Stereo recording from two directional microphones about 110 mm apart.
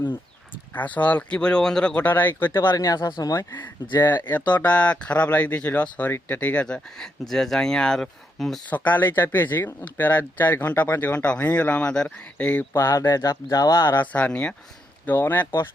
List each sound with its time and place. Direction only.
0.7 s speech: 15° left (ahead or behind)
8.7 s speech: 15° left (ahead or behind)
12.7 s speech: 30° left (ahead or behind)